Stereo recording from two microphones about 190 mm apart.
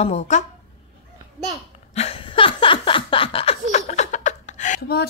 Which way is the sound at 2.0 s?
30° left (ahead or behind).